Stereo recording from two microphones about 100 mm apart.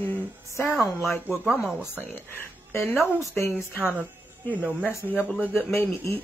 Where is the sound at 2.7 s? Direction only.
25° left (ahead or behind).